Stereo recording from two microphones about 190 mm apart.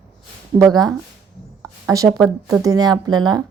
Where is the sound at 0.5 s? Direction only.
20° right (ahead or behind).